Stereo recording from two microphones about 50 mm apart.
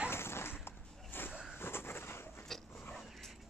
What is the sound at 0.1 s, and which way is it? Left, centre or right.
Dog, left.